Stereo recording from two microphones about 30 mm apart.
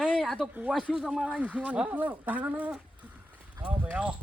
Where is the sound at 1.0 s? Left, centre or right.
Centre.